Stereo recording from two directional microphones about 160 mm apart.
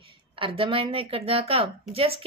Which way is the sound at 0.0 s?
35° right (ahead or behind).